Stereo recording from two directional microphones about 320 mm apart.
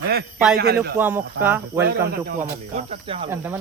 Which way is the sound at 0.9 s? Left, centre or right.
Centre.